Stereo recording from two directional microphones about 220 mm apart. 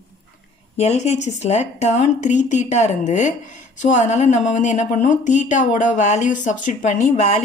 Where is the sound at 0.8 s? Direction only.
30° left (ahead or behind).